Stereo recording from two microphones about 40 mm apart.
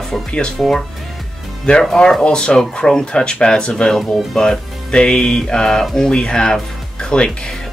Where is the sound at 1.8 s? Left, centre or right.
Centre; by 3.9 s left.